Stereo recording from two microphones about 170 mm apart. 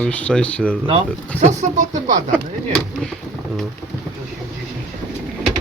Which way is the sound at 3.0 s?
5° left (ahead or behind).